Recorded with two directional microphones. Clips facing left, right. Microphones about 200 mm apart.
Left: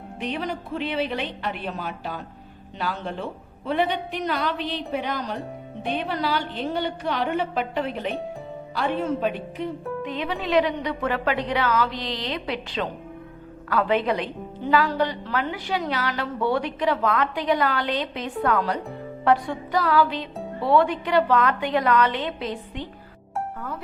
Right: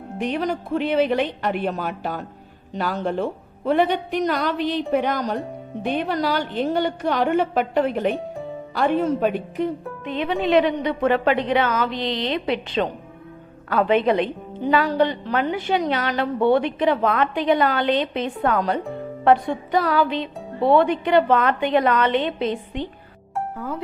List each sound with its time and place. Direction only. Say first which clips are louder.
0.2 s a woman's voice: right 5 dB; 45° right (ahead or behind)
10.1 s a woman's voice: right 6 dB; 25° right (ahead or behind)